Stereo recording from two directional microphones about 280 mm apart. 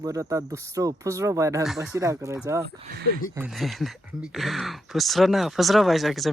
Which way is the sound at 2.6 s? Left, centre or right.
Right.